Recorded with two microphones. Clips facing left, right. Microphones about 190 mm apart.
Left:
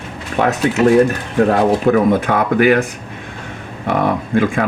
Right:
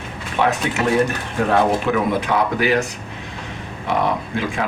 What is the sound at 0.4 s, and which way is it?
Speech, 45° left (ahead or behind).